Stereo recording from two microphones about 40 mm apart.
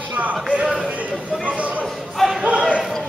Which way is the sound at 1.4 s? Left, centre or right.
Right.